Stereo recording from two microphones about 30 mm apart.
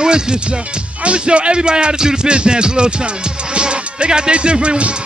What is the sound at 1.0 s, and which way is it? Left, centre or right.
Music, right.